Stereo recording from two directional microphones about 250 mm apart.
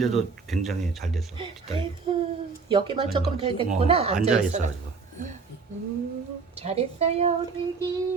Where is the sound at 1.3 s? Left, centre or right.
Centre.